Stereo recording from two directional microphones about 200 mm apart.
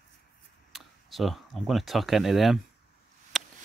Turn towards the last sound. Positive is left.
turn(degrees=0)  # may be behind; listen again after turning